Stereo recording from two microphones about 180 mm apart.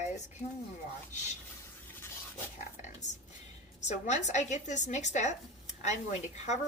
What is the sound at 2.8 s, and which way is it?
Whispering, 40° left (ahead or behind).